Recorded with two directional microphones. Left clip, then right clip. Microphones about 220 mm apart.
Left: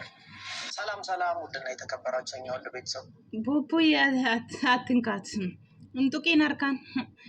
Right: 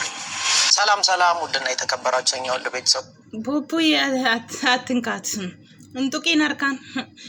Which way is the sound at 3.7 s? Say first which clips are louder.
Right 4 dB; 5° left (ahead or behind).